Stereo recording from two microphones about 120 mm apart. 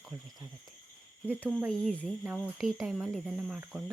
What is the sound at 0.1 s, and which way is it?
Speech, 25° right (ahead or behind).